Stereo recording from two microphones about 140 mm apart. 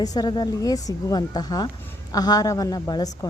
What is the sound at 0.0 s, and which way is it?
A woman's voice, 30° left (ahead or behind).